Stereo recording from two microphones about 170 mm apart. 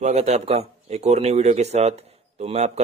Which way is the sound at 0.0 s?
40° right (ahead or behind).